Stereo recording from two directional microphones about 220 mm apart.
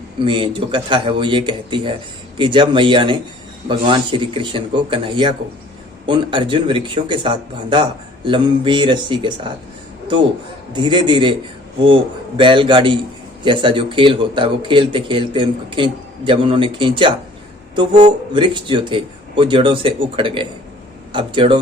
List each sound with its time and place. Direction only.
0.3 s speech: 25° right (ahead or behind)
10.7 s speech: 20° right (ahead or behind)
12.4 s speech: 20° right (ahead or behind)